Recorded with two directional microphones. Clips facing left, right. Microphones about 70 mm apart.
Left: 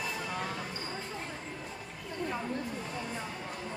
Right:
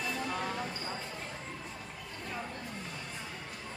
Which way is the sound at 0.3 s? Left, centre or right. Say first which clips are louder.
Right 1 dB; centre.